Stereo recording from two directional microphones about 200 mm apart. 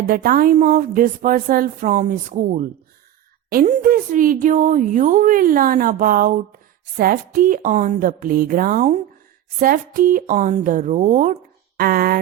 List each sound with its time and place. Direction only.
0.1 s speech: 45° right (ahead or behind)